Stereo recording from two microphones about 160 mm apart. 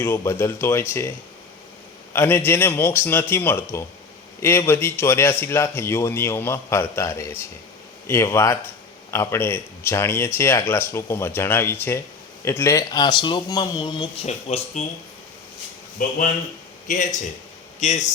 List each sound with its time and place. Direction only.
0.0 s a man's voice: 15° left (ahead or behind)
2.1 s a man's voice: 15° left (ahead or behind); by 14.1 s 30° left (ahead or behind)
14.3 s speech: 45° left (ahead or behind)
16.0 s speech: 60° left (ahead or behind)